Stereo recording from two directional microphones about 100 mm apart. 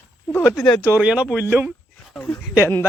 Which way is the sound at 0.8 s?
15° right (ahead or behind).